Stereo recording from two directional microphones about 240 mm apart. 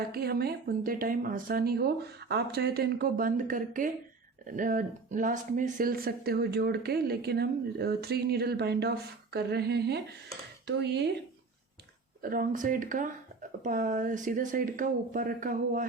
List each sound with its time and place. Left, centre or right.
0.1 s speech: right
12.2 s speech: right